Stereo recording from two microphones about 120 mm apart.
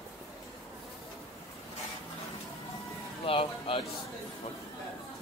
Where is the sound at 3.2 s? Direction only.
50° left (ahead or behind).